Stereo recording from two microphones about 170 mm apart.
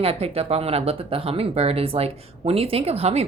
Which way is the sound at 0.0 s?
35° right (ahead or behind).